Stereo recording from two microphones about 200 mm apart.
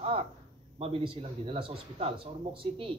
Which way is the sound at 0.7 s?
30° right (ahead or behind).